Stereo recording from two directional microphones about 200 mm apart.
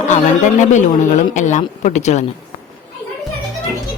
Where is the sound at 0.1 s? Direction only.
35° left (ahead or behind).